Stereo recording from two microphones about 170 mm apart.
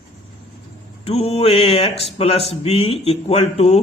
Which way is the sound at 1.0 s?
35° left (ahead or behind).